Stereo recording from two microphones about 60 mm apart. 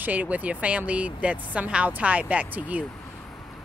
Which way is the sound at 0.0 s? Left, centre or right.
Right.